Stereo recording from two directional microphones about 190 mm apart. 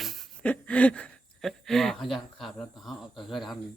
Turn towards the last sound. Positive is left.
turn(degrees=0)  # may be behind; listen again after turning